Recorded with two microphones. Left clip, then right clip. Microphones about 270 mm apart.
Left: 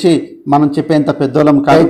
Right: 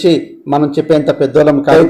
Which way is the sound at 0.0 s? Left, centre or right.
Left.